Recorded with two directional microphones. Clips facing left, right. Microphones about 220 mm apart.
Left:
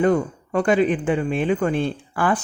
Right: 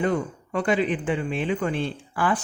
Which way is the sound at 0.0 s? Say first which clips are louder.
Left 6 dB; 45° left (ahead or behind).